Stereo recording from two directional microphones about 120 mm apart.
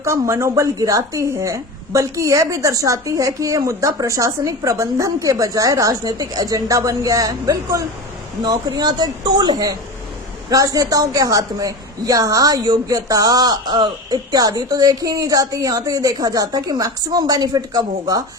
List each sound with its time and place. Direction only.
0.0 s a woman's voice: 25° right (ahead or behind)